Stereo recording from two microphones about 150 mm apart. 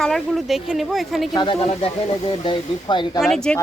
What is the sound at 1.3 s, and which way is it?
Speech, 35° left (ahead or behind).